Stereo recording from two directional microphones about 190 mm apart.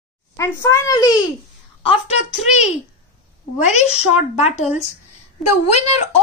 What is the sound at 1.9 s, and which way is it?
A child's voice, 35° left (ahead or behind).